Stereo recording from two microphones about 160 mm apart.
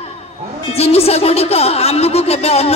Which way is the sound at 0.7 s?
40° left (ahead or behind).